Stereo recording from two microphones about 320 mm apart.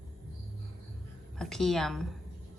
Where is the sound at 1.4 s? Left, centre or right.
Centre.